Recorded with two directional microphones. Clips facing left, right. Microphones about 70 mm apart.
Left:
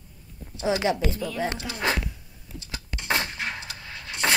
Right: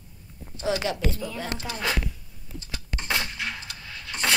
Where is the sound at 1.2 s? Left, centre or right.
Centre.